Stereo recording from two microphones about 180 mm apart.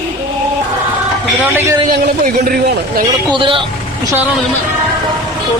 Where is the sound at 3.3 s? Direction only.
30° right (ahead or behind).